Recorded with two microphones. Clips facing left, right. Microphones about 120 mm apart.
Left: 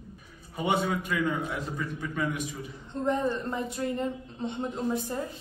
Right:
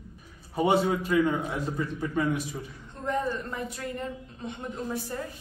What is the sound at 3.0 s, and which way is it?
A woman's voice, 20° left (ahead or behind).